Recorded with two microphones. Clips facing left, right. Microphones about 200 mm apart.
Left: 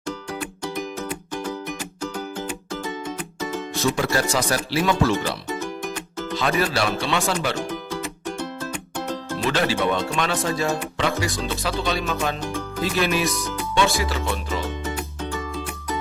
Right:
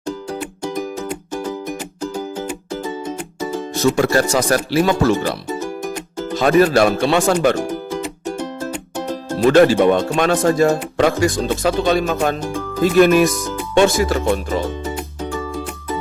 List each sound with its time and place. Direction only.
3.9 s speech: 45° right (ahead or behind)
6.6 s speech: 50° right (ahead or behind)
7.7 s music: 15° right (ahead or behind)
9.4 s speech: 50° right (ahead or behind)
12.4 s speech: 15° right (ahead or behind)
12.8 s speech: 50° right (ahead or behind)